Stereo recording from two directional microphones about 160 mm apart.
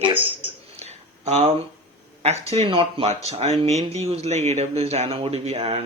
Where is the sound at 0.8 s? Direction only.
40° right (ahead or behind).